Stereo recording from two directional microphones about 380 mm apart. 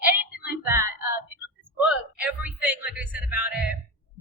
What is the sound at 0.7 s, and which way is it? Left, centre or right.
Female singing, centre.